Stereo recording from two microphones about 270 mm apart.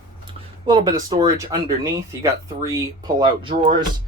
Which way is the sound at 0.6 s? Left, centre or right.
Centre.